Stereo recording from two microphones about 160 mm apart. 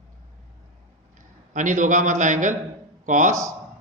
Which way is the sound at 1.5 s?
50° right (ahead or behind).